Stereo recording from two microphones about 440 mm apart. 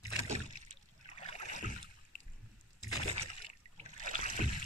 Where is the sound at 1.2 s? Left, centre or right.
Centre.